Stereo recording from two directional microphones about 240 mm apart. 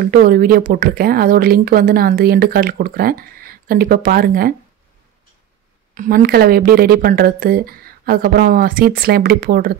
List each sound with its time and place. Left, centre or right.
0.0 s speech: right
5.9 s speech: right